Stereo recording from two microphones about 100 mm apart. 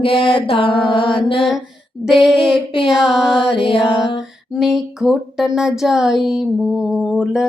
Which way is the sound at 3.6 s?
60° left (ahead or behind).